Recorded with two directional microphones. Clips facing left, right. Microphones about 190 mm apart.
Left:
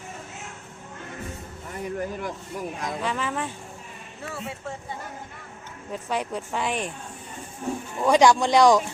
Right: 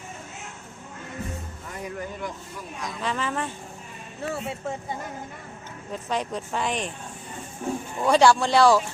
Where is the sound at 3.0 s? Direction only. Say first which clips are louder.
Right 2 dB; 10° left (ahead or behind).